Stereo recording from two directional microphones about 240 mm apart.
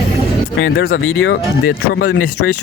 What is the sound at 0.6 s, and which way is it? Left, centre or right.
Speech, left.